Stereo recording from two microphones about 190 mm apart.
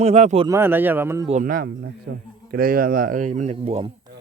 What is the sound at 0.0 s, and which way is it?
Speech, 35° right (ahead or behind).